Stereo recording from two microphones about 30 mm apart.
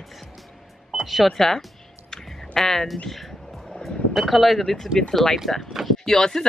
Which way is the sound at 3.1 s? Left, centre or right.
Centre.